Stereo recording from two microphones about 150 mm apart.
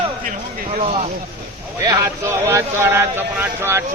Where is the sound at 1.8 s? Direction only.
15° right (ahead or behind).